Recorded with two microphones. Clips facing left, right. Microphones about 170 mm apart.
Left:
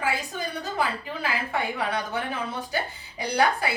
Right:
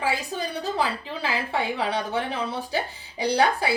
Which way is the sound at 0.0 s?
30° right (ahead or behind).